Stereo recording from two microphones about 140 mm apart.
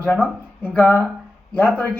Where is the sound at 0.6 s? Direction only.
15° left (ahead or behind).